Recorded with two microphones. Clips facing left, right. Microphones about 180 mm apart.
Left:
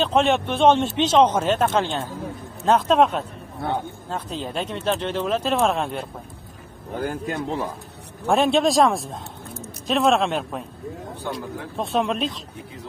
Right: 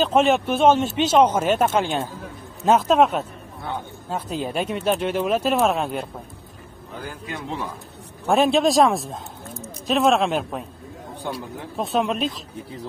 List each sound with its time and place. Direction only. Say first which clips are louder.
0.0 s speech: right 1 dB; centre (ahead or behind)
7.0 s speech: left 7 dB; 50° left (ahead or behind)
8.3 s speech: right 1 dB; centre (ahead or behind)